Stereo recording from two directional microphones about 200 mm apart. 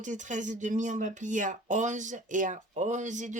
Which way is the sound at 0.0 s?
40° right (ahead or behind).